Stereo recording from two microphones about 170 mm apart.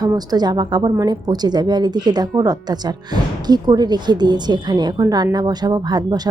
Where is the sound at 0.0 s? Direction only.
25° right (ahead or behind).